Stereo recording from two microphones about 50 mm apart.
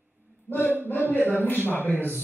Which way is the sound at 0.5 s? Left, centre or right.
Left.